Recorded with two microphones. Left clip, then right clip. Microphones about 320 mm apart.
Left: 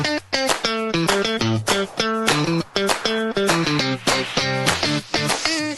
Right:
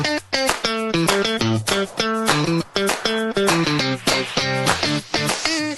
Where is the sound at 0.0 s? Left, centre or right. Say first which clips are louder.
Right 1 dB; centre.